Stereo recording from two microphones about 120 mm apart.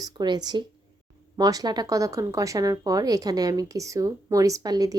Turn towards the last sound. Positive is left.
turn(degrees=-30)  # may be behind; listen again after turning